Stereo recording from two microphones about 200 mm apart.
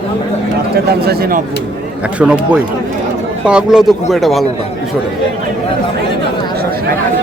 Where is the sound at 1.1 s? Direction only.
50° right (ahead or behind).